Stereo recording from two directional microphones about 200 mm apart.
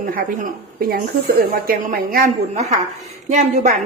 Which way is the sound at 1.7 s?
45° right (ahead or behind).